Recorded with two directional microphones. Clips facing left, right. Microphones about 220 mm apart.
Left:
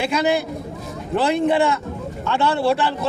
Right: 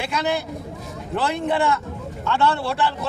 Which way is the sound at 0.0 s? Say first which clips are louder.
Left 5 dB; 15° left (ahead or behind).